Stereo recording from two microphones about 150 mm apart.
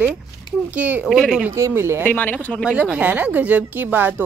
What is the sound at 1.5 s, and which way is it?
Speech, 20° right (ahead or behind).